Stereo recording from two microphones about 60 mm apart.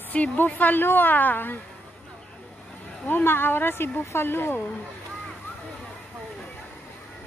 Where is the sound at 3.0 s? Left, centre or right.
Left.